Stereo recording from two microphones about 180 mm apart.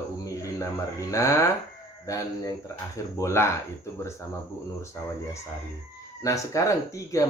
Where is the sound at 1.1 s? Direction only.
15° left (ahead or behind).